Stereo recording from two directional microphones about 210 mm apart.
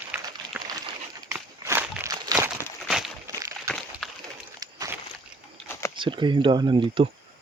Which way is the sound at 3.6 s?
Centre (ahead or behind).